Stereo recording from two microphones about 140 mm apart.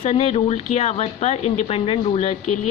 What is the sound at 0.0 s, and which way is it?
Speech, 45° left (ahead or behind).